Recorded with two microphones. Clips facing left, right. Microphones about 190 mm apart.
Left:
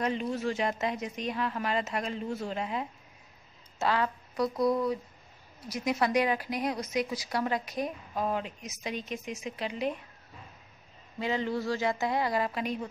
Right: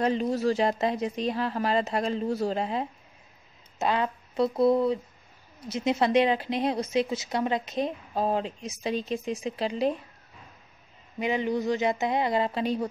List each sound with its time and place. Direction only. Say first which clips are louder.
0.0 s speech: right 5 dB; 35° right (ahead or behind)
3.8 s a woman's voice: right 2 dB; 20° right (ahead or behind)
11.1 s a woman's voice: right 4 dB; 15° right (ahead or behind)